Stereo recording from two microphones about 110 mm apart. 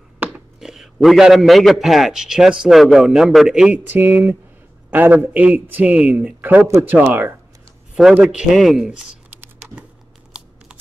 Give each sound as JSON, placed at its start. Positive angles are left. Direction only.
{"t": 0.6, "sound": "a man's voice", "side_deg": -5}
{"t": 7.9, "sound": "speech", "side_deg": -5}